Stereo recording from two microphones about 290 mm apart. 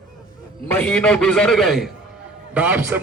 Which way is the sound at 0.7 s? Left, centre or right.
Centre.